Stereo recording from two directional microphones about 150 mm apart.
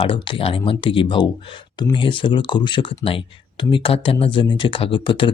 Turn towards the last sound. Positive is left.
turn(degrees=35)  # may be behind; listen again after turning